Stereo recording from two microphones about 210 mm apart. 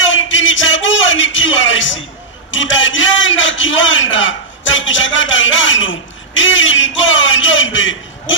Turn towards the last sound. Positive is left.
turn(degrees=65)  # may be behind; listen again after turning